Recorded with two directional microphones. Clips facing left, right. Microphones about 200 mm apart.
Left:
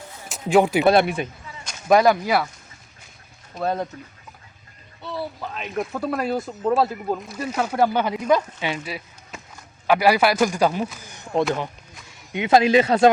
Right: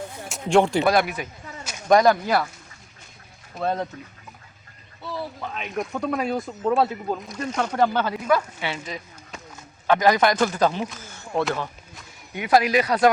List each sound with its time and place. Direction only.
0.3 s speech: centre (ahead or behind)
0.9 s speech: 25° left (ahead or behind)
1.9 s speech: 5° left (ahead or behind)
3.5 s speech: 5° left (ahead or behind)
5.0 s a man's voice: centre (ahead or behind); by 13.1 s 25° left (ahead or behind)